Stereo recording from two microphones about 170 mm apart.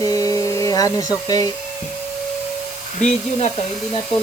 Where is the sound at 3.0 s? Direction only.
40° left (ahead or behind).